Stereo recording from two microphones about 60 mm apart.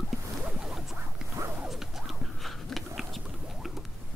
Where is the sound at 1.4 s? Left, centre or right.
Right.